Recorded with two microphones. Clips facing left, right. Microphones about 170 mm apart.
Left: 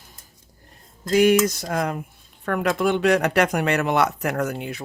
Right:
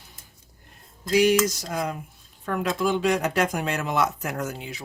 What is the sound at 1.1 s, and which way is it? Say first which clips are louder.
Speech: left 3 dB; 55° left (ahead or behind).